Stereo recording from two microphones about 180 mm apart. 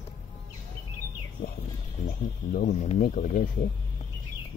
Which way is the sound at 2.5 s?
45° left (ahead or behind).